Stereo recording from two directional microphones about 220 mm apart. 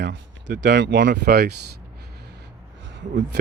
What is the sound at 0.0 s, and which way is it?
Speech, 55° right (ahead or behind).